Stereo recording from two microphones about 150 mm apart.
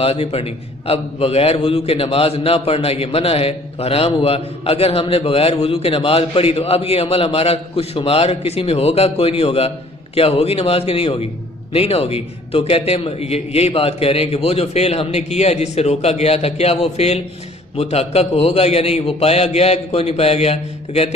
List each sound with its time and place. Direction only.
0.0 s a man's voice: 40° left (ahead or behind)